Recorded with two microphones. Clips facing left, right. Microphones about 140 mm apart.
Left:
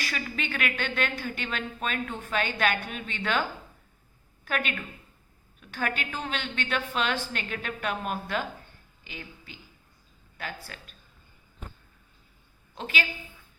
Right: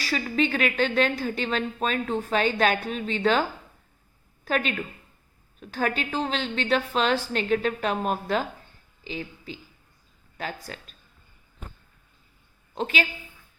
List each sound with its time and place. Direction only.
0.0 s a woman's voice: 35° right (ahead or behind)
4.4 s a woman's voice: 35° right (ahead or behind)
10.7 s a woman's voice: 35° right (ahead or behind)